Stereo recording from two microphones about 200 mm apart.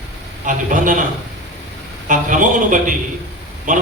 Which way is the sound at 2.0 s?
40° right (ahead or behind).